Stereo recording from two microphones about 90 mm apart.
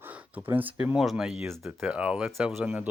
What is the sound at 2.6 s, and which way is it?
Speech, 15° right (ahead or behind).